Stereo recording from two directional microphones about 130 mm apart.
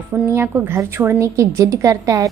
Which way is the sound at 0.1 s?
20° right (ahead or behind).